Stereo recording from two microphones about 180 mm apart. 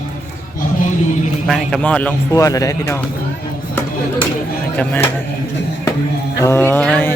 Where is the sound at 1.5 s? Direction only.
Centre (ahead or behind).